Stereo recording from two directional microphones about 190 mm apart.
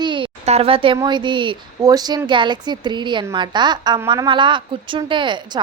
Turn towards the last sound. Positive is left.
turn(degrees=-25)  # may be behind; listen again after turning